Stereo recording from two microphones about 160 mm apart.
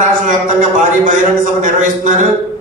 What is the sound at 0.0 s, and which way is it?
A man's voice, 55° right (ahead or behind).